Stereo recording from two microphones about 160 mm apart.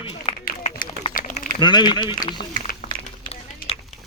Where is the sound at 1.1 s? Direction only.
60° left (ahead or behind).